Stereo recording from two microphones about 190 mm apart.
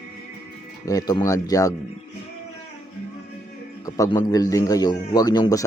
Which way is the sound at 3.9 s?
15° left (ahead or behind).